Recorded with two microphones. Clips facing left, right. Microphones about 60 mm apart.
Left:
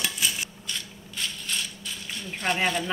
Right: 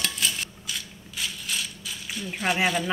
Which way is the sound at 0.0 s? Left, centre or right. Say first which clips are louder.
Even; centre.